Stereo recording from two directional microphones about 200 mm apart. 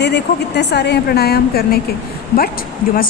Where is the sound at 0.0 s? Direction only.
55° left (ahead or behind).